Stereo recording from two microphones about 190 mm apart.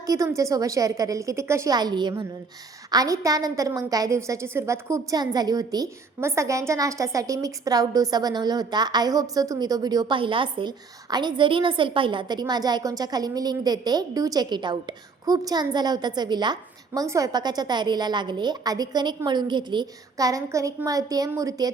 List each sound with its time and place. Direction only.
0.0 s a woman's voice: 15° right (ahead or behind)